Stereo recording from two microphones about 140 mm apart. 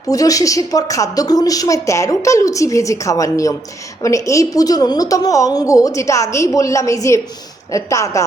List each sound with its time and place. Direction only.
0.1 s a woman's voice: 25° left (ahead or behind)